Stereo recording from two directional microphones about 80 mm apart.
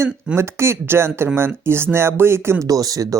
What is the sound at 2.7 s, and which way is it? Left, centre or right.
Speech, right.